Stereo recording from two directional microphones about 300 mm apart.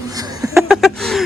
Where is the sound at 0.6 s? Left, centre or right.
Centre.